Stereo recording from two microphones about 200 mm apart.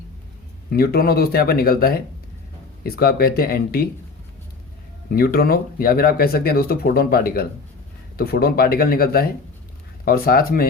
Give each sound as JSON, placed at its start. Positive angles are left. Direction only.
{"t": 0.7, "sound": "speech", "side_deg": 50}
{"t": 5.1, "sound": "speech", "side_deg": 50}